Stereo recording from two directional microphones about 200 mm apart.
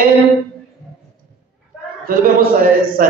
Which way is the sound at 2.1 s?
45° right (ahead or behind).